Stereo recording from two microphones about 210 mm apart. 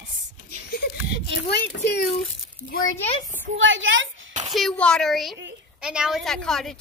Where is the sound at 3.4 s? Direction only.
65° right (ahead or behind).